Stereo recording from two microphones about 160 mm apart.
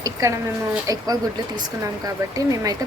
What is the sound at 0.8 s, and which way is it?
Speech, 20° right (ahead or behind).